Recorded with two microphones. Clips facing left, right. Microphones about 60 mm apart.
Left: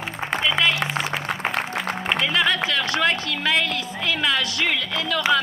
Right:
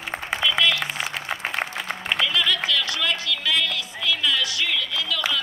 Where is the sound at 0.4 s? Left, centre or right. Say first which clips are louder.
Left 1 dB; left.